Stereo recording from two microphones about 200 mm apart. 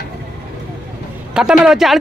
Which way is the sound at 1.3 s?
5° right (ahead or behind).